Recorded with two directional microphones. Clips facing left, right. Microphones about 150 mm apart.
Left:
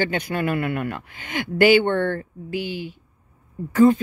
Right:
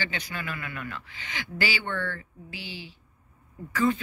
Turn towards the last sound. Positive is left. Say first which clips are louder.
# left 10 dB
turn(degrees=50)  # may be behind; listen again after turning